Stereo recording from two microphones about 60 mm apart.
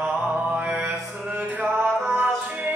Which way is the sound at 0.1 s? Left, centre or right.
Right.